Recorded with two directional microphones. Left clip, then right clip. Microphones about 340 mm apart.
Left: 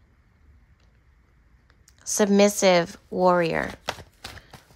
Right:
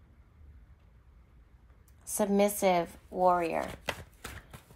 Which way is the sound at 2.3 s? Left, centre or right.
Left.